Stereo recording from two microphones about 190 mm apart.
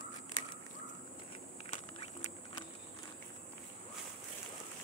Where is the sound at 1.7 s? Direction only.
35° left (ahead or behind).